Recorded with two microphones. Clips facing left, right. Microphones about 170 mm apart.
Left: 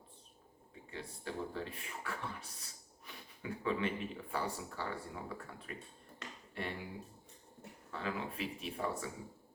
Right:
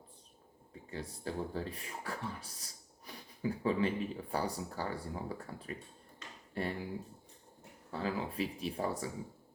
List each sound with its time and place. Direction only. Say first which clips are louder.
0.9 s speech: right 4 dB; 35° right (ahead or behind)
7.9 s speech: right 4 dB; 35° right (ahead or behind)